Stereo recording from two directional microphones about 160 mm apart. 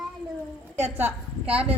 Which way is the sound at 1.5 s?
35° right (ahead or behind).